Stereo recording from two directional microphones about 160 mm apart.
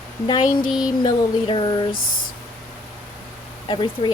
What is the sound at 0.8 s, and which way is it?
Speech, 30° left (ahead or behind).